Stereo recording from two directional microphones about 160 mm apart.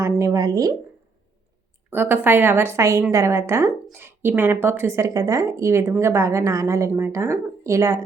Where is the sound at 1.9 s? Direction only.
15° right (ahead or behind).